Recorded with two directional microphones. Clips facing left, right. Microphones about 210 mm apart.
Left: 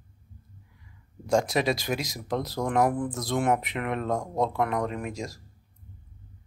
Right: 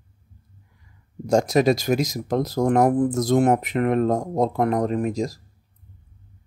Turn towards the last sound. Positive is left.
turn(degrees=-35)  # may be behind; listen again after turning